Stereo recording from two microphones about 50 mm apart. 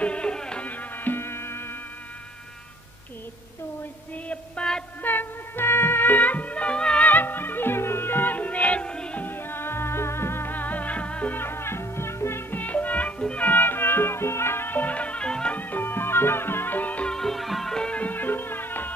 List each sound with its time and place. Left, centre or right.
0.0 s music: left
0.7 s music: left
4.3 s a sound: centre
5.0 s music: left
7.1 s music: left; by 9.2 s centre
9.2 s music: left
10.5 s music: left
11.3 s music: left
12.5 s music: left
15.5 s music: left
17.0 s music: centre
17.7 s music: left
18.0 s music: left